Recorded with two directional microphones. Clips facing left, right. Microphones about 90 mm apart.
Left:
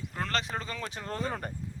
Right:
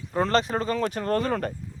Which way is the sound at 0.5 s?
50° right (ahead or behind).